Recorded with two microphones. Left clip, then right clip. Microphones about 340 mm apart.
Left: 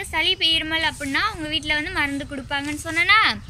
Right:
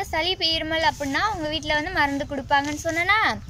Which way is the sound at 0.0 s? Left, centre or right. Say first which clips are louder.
Left 3 dB; right.